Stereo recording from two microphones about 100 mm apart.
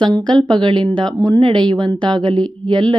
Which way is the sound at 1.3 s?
50° right (ahead or behind).